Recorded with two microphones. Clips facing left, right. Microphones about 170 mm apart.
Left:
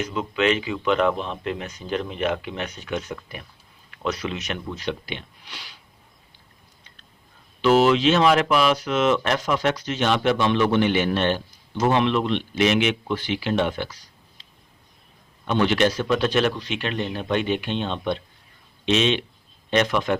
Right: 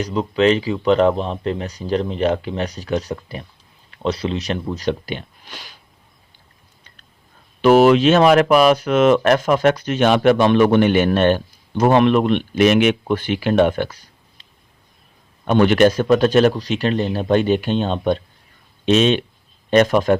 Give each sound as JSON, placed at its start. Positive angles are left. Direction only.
{"t": 0.0, "sound": "speech", "side_deg": -35}
{"t": 7.6, "sound": "speech", "side_deg": -55}
{"t": 15.4, "sound": "speech", "side_deg": -50}